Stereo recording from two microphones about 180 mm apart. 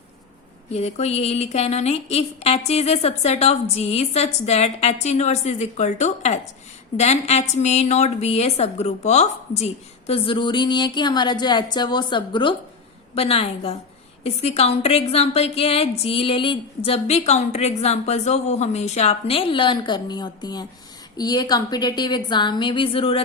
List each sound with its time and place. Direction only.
0.7 s a woman's voice: 35° left (ahead or behind)